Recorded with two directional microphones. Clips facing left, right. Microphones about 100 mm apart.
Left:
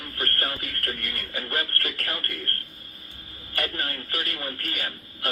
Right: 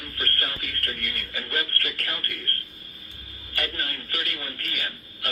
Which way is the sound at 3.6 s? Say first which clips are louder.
Left 1 dB; 40° left (ahead or behind).